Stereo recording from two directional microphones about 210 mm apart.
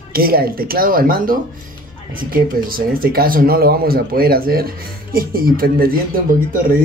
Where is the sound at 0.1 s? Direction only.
45° right (ahead or behind).